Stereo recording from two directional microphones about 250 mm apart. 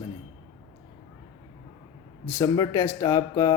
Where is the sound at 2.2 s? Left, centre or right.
Centre.